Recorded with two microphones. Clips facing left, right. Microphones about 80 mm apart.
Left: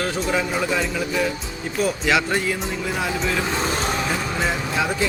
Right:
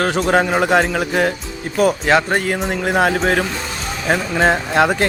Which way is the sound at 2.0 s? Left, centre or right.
Right.